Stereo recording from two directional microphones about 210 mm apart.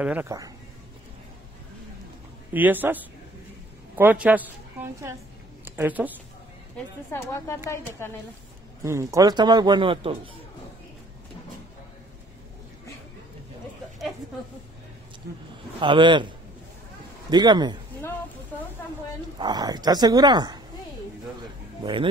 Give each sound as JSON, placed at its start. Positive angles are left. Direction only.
{"t": 0.0, "sound": "a man's voice", "side_deg": -10}
{"t": 2.5, "sound": "a man's voice", "side_deg": -10}
{"t": 5.7, "sound": "speech", "side_deg": -10}
{"t": 7.1, "sound": "speech", "side_deg": 10}
{"t": 8.8, "sound": "speech", "side_deg": -15}
{"t": 15.2, "sound": "speech", "side_deg": -50}
{"t": 15.8, "sound": "speech", "side_deg": -25}
{"t": 17.3, "sound": "speech", "side_deg": -20}
{"t": 19.3, "sound": "speech", "side_deg": -20}